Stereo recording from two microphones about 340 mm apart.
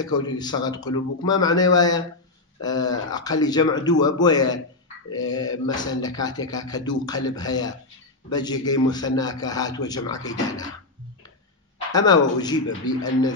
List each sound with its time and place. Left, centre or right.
0.0 s a man's voice: centre
5.2 s speech: left
5.9 s a man's voice: centre
11.9 s a man's voice: centre